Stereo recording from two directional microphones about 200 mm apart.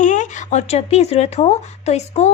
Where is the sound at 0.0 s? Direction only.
40° left (ahead or behind).